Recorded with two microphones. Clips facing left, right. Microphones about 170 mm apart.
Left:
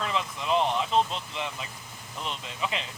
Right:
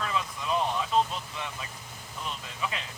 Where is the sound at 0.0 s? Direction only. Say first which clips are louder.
Left 2 dB; 25° left (ahead or behind).